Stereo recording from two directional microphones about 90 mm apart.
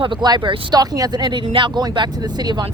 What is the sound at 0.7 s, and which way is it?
Speech, 45° right (ahead or behind).